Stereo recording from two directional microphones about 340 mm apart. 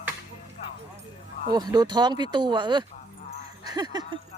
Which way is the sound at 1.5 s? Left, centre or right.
Centre.